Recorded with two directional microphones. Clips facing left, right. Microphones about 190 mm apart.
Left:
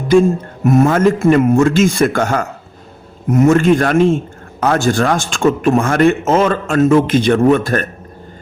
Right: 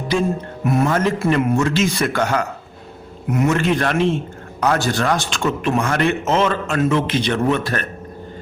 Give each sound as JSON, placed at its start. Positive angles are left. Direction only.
{"t": 0.6, "sound": "a man's voice", "side_deg": 45}